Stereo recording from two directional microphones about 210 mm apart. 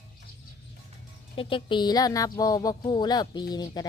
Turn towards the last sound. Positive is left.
turn(degrees=20)  # may be behind; listen again after turning